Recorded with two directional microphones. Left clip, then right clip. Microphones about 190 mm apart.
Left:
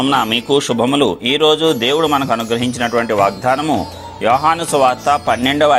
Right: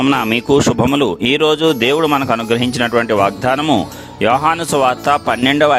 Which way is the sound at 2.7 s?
60° right (ahead or behind).